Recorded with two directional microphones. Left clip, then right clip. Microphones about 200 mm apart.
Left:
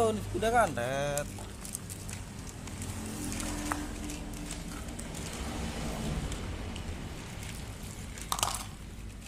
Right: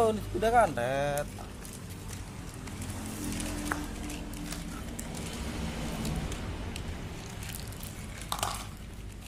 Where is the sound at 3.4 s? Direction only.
Centre (ahead or behind).